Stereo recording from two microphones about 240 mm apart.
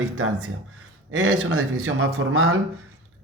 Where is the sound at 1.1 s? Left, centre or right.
Right.